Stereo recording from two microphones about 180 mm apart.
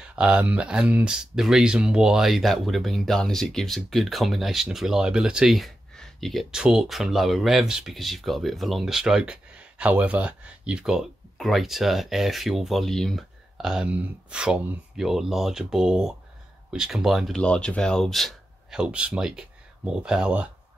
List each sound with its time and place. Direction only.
0.0 s speech: 5° right (ahead or behind)